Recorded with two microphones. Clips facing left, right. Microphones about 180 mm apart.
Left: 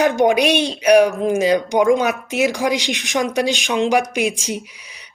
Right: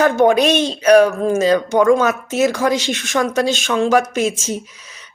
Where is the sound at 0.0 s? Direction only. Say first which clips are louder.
Right 2 dB; 15° left (ahead or behind).